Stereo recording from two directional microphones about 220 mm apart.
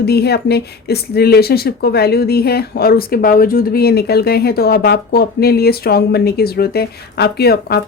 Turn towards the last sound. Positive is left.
turn(degrees=45)  # may be behind; listen again after turning